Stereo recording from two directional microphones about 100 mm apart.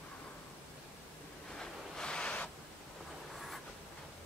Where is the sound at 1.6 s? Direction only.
10° left (ahead or behind).